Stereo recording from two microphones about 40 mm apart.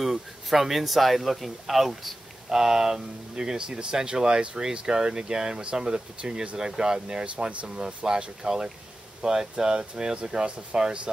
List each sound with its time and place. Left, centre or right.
0.0 s speech: centre; by 7.5 s right
7.6 s speech: centre